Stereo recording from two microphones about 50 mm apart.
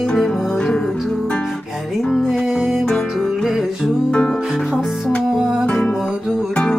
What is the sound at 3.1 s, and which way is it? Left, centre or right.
Music, centre.